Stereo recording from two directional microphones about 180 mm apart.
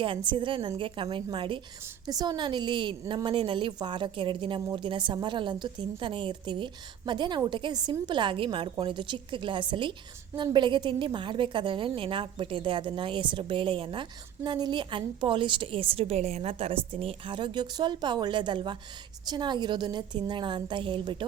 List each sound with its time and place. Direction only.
0.3 s a woman's voice: 25° right (ahead or behind)